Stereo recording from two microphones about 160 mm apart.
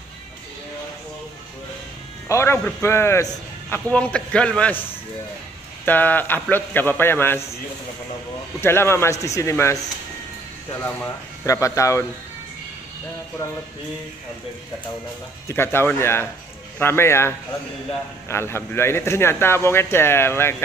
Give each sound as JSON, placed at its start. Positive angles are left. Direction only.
{"t": 2.2, "sound": "speech", "side_deg": 15}
{"t": 5.9, "sound": "speech", "side_deg": 10}
{"t": 8.5, "sound": "speech", "side_deg": 15}
{"t": 10.8, "sound": "speech", "side_deg": 15}
{"t": 15.4, "sound": "speech", "side_deg": 15}